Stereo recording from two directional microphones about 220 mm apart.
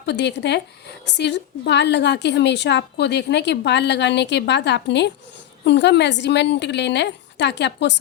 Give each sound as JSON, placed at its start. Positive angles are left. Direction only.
{"t": 0.0, "sound": "a woman's voice", "side_deg": 50}